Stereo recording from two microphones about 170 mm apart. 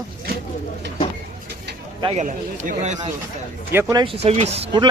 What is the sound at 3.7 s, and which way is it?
Speech, 25° right (ahead or behind).